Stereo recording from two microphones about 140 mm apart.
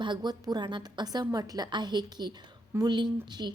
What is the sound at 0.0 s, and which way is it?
A woman's voice, 30° right (ahead or behind).